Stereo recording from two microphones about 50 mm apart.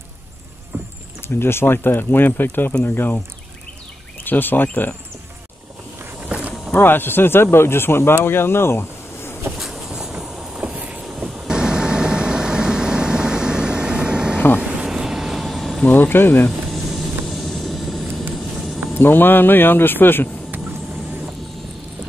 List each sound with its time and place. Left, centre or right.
0.7 s vehicle: right
1.2 s speech: left
4.2 s speech: left
6.7 s speech: left
9.8 s vehicle: centre
10.6 s vehicle: right
11.2 s vehicle: centre
14.9 s vehicle: centre
15.9 s speech: left
16.7 s vehicle: centre
18.9 s speech: left